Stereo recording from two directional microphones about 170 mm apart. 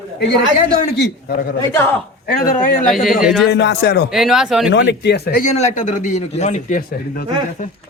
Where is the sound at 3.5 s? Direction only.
85° left.